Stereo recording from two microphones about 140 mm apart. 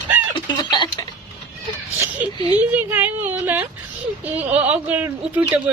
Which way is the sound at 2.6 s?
10° right (ahead or behind).